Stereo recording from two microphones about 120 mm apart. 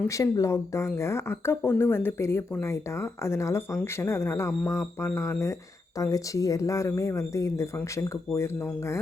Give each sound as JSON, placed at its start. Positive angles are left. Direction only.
{"t": 0.1, "sound": "speech", "side_deg": 25}